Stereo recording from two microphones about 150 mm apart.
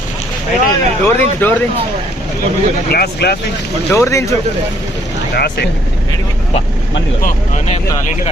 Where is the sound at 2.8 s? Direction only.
90° left.